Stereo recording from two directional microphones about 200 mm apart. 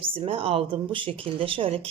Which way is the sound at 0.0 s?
25° right (ahead or behind).